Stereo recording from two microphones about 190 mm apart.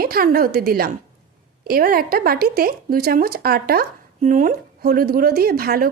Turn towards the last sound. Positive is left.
turn(degrees=-55)  # may be behind; listen again after turning